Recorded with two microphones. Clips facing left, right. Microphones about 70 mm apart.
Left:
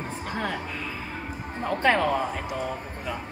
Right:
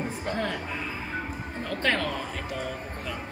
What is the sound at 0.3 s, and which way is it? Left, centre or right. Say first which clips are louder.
Speech: even; centre.